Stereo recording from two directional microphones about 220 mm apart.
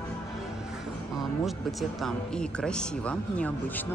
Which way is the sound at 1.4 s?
Centre (ahead or behind).